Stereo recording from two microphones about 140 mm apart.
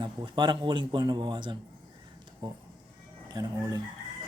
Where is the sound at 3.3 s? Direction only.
25° right (ahead or behind).